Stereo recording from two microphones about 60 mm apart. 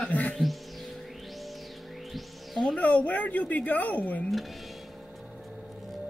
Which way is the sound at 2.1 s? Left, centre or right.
Centre.